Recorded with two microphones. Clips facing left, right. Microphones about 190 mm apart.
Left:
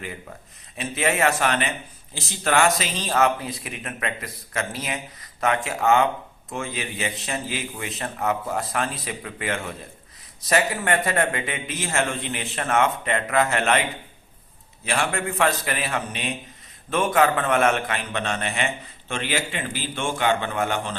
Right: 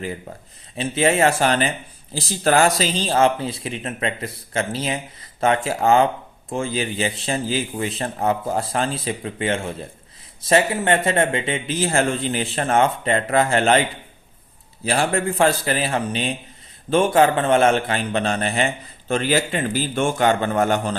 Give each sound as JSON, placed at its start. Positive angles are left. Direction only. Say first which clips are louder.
{"t": 0.8, "sound": "a man's voice", "louder": "right 5 dB", "side_deg": -30}
{"t": 14.8, "sound": "a man's voice", "louder": "right 5 dB", "side_deg": -35}